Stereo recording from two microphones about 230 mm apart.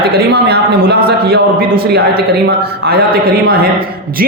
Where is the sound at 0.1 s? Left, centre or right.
Right.